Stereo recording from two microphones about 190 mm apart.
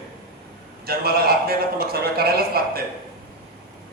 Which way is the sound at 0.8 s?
55° right (ahead or behind).